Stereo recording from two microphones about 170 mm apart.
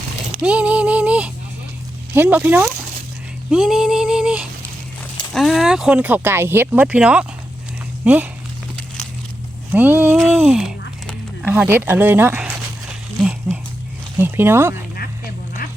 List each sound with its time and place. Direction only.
0.4 s music: 5° right (ahead or behind)
2.1 s speech: 10° right (ahead or behind)
3.5 s female singing: 5° right (ahead or behind)
5.3 s speech: centre (ahead or behind)
9.7 s speech: 10° right (ahead or behind)
13.5 s a sound: 10° right (ahead or behind)
14.2 s speech: 15° right (ahead or behind)
14.9 s duck: 60° left (ahead or behind)